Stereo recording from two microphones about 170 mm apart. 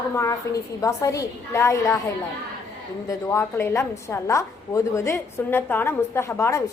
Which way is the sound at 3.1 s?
15° left (ahead or behind).